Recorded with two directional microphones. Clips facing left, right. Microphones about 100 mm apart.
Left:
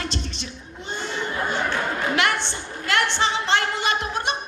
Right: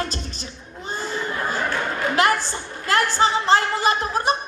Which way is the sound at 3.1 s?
35° right (ahead or behind).